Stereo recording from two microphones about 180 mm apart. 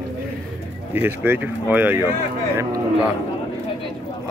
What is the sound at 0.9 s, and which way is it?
Speech, 10° right (ahead or behind).